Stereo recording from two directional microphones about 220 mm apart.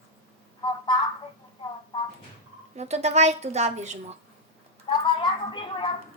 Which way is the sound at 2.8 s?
30° right (ahead or behind).